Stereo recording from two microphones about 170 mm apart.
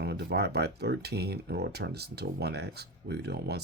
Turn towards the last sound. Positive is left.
turn(degrees=-70)  # may be behind; listen again after turning